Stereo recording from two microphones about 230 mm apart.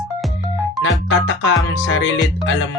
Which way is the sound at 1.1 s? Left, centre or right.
Left.